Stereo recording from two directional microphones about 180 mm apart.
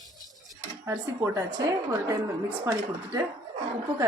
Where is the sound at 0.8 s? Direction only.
15° right (ahead or behind).